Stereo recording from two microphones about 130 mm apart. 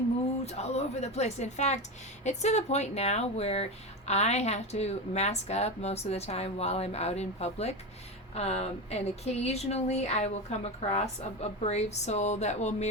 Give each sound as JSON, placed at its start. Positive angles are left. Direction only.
{"t": 0.4, "sound": "speech", "side_deg": 55}